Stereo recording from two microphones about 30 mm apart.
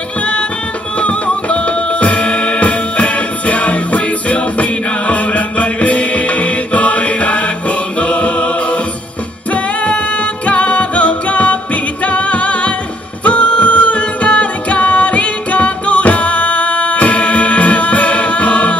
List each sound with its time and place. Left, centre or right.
0.9 s music: left
8.0 s a capella: left
10.4 s music: left